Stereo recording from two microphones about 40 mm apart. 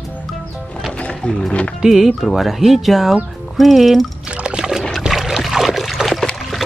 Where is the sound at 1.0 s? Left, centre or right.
Left.